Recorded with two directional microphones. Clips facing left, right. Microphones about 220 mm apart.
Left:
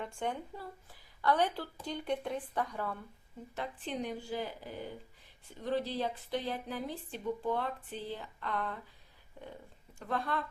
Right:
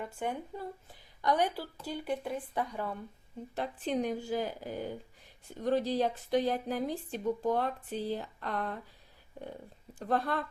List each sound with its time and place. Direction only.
0.0 s a woman's voice: 5° right (ahead or behind)
3.5 s a woman's voice: 40° right (ahead or behind)
10.0 s a woman's voice: 40° right (ahead or behind)